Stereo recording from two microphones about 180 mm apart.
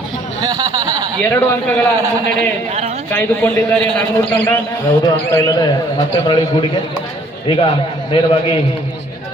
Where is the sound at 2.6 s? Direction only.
35° right (ahead or behind).